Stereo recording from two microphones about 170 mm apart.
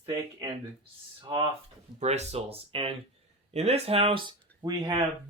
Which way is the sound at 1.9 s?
40° right (ahead or behind).